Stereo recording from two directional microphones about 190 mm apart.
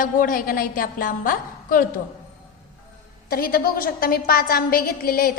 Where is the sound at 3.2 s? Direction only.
55° left (ahead or behind).